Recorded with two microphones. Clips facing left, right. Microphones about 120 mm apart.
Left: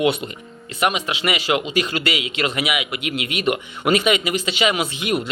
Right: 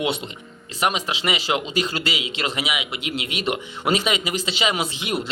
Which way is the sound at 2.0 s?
60° left (ahead or behind).